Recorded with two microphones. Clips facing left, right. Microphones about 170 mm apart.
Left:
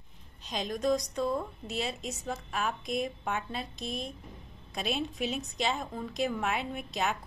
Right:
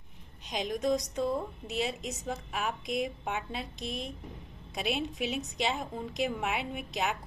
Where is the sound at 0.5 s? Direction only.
15° right (ahead or behind).